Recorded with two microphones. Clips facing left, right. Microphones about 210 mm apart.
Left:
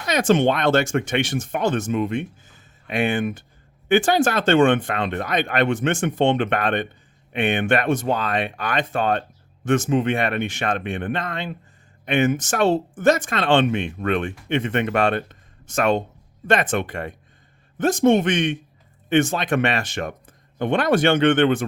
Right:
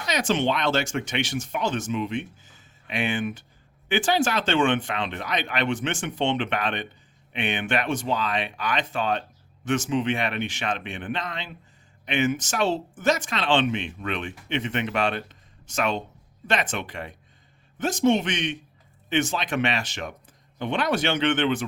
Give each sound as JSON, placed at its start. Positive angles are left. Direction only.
{"t": 0.0, "sound": "speech", "side_deg": 55}